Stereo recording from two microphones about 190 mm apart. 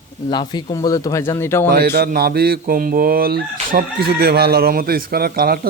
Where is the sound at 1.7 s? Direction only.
55° right (ahead or behind).